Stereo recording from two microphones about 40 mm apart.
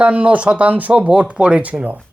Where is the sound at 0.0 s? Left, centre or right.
Right.